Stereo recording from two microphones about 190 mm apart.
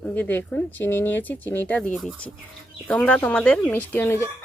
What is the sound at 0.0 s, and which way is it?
Speech, 10° left (ahead or behind).